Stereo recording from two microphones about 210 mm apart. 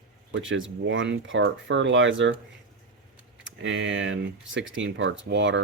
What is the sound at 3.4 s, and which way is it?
Speech, 60° right (ahead or behind).